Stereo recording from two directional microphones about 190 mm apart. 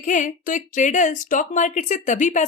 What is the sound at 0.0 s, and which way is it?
A woman's voice, 40° left (ahead or behind).